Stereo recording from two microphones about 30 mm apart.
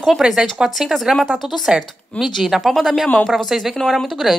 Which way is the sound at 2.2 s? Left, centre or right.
Left.